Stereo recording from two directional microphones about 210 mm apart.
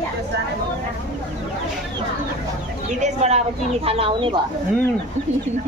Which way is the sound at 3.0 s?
35° right (ahead or behind).